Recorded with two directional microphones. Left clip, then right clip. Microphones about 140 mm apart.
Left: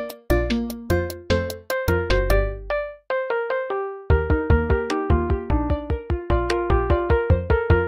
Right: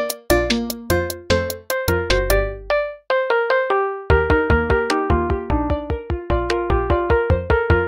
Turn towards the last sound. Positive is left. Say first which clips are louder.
# right 3 dB
turn(degrees=-25)  # may be behind; listen again after turning